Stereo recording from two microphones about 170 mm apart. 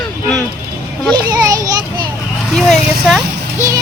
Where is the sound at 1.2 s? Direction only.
20° right (ahead or behind).